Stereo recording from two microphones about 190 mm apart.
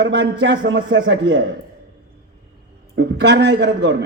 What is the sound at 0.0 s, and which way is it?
A man's voice, 70° right (ahead or behind).